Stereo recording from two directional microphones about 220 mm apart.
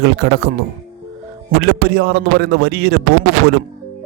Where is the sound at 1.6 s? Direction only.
45° right (ahead or behind).